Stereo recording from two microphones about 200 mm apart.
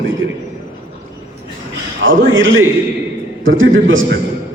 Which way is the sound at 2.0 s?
75° right (ahead or behind).